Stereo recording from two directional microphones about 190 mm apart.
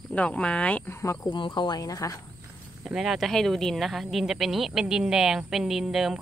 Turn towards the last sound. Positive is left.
turn(degrees=0)  # may be behind; listen again after turning